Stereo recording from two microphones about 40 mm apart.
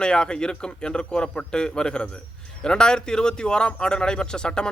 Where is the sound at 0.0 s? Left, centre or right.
Left.